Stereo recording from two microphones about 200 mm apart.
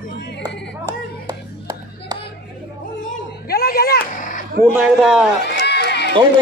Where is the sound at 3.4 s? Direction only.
50° left (ahead or behind).